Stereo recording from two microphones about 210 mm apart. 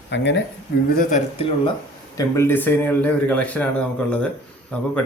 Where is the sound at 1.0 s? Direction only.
35° left (ahead or behind).